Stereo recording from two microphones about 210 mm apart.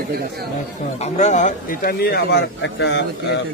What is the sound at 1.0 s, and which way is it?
Speech, 35° left (ahead or behind).